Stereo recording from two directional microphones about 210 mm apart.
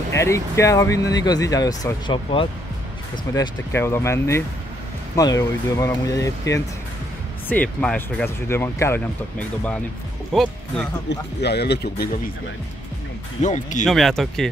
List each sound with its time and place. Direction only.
0.1 s speech: 15° left (ahead or behind)
11.1 s speech: 50° left (ahead or behind)
13.4 s speech: 35° left (ahead or behind)
13.8 s speech: centre (ahead or behind)